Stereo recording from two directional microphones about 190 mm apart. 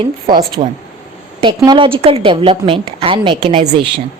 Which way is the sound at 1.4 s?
25° right (ahead or behind).